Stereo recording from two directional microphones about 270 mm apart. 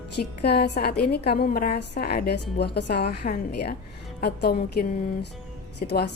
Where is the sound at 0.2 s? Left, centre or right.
Left.